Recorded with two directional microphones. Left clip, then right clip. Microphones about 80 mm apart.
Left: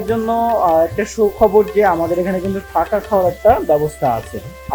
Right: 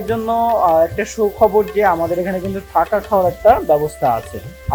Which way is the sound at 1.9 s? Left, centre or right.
Centre.